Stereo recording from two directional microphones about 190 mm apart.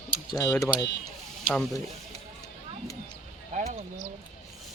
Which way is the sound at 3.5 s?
40° right (ahead or behind).